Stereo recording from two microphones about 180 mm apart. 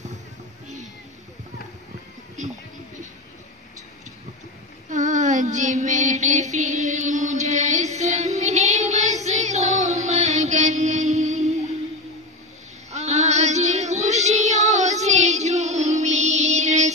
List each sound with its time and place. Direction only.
4.8 s child singing: 45° right (ahead or behind)
12.9 s child singing: 35° right (ahead or behind)